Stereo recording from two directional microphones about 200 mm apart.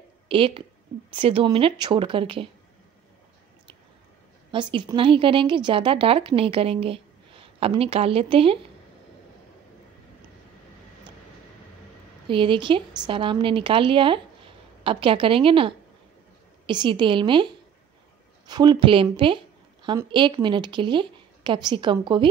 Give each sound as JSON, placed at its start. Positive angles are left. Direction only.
{"t": 0.3, "sound": "a woman's voice", "side_deg": -25}
{"t": 4.5, "sound": "a woman's voice", "side_deg": -25}
{"t": 12.3, "sound": "a woman's voice", "side_deg": -25}